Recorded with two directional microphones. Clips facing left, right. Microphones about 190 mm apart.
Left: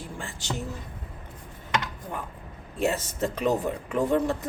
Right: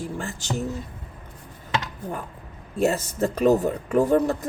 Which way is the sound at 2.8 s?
40° right (ahead or behind).